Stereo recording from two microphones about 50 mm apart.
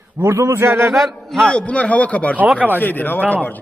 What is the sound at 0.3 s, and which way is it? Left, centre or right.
Speech, right.